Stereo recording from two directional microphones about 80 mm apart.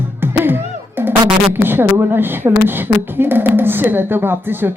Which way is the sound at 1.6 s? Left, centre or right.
Right.